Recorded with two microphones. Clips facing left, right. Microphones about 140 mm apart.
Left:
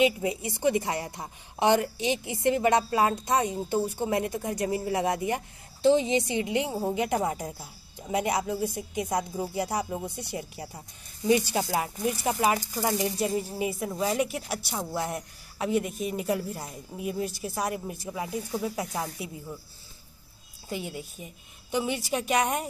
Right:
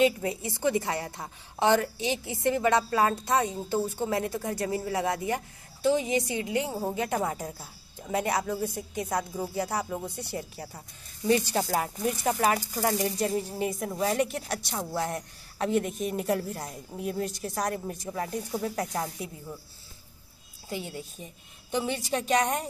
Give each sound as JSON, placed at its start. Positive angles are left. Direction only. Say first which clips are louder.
{"t": 0.0, "sound": "a woman's voice", "louder": "even", "side_deg": 15}
{"t": 20.7, "sound": "a woman's voice", "louder": "left 1 dB", "side_deg": 10}